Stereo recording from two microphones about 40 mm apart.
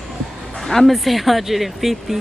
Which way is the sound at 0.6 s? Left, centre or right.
Centre.